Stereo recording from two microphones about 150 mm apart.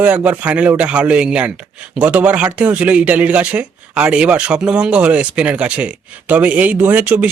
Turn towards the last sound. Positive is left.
turn(degrees=-10)  # may be behind; listen again after turning